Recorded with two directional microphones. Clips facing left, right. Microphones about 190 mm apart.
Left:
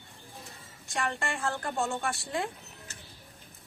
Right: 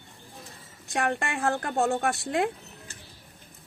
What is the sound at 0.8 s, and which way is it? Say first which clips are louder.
A woman's voice: right 5 dB; 60° right (ahead or behind).